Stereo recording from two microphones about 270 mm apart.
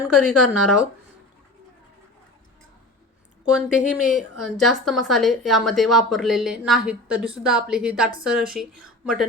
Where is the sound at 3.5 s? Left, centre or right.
Centre.